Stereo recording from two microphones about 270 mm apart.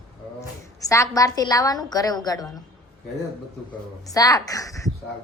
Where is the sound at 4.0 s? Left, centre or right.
Centre.